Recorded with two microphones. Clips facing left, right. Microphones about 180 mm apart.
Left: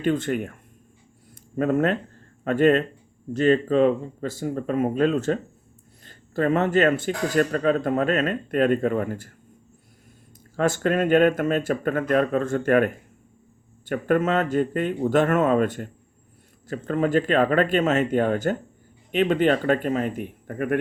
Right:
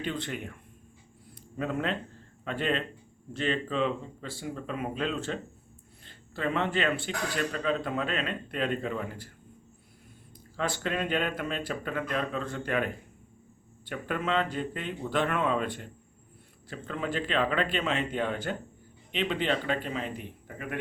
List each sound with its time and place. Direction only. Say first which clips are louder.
0.0 s speech: left 11 dB; 45° left (ahead or behind)
10.6 s speech: left 9 dB; 45° left (ahead or behind)